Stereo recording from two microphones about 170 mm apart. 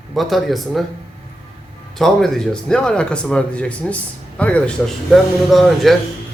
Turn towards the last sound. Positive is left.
turn(degrees=0)  # may be behind; listen again after turning